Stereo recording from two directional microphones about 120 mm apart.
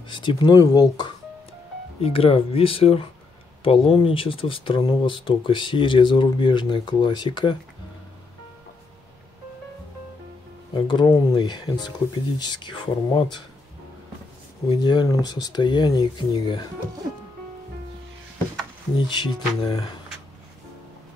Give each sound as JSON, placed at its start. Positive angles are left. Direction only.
{"t": 0.1, "sound": "speech", "side_deg": 40}
{"t": 2.0, "sound": "speech", "side_deg": 55}
{"t": 10.7, "sound": "speech", "side_deg": 40}
{"t": 14.7, "sound": "speech", "side_deg": 40}
{"t": 18.9, "sound": "speech", "side_deg": 40}